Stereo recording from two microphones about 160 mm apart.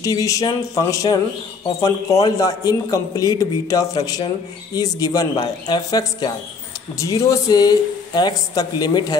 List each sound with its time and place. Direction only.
0.0 s speech: 20° left (ahead or behind)